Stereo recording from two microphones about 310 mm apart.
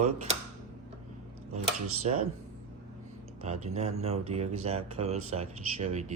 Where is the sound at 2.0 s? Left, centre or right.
Right.